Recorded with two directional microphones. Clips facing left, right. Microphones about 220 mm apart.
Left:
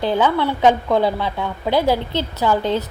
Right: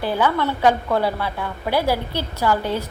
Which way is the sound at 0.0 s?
20° left (ahead or behind).